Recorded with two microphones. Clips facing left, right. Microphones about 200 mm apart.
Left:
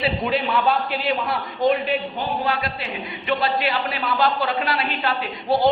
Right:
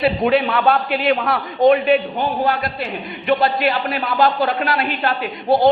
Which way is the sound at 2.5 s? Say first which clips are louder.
Right 4 dB; 50° right (ahead or behind).